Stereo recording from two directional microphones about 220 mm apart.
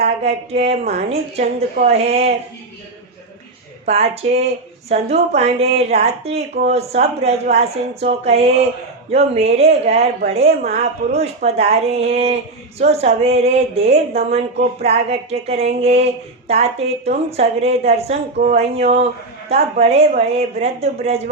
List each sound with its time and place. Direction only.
0.0 s speech: 30° right (ahead or behind)
3.8 s speech: 30° right (ahead or behind)